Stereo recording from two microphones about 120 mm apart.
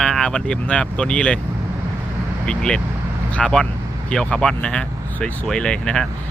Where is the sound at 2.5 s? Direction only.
5° left (ahead or behind).